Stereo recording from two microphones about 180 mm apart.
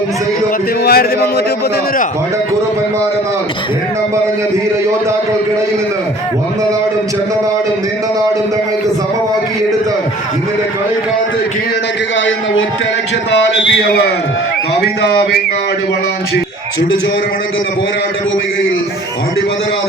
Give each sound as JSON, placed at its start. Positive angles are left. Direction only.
{"t": 0.9, "sound": "speech", "side_deg": 60}
{"t": 13.7, "sound": "a man's voice", "side_deg": 65}